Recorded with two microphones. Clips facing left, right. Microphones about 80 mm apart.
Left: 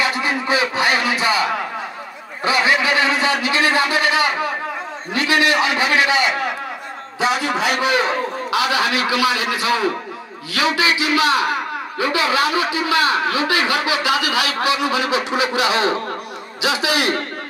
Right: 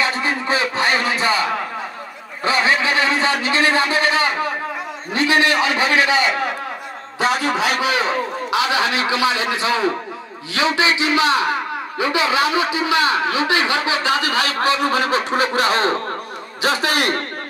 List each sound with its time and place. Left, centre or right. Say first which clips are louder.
0.0 s music: even; right
2.4 s a sound: even; right
5.1 s a man's voice: even; right
7.2 s a man's voice: right 1 dB; right
8.5 s a man's voice: even; right